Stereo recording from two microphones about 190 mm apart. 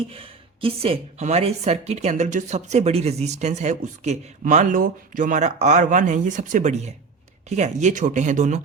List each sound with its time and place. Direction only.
0.1 s speech: 30° right (ahead or behind)